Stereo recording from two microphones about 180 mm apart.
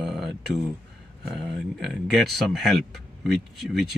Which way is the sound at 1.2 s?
Centre (ahead or behind).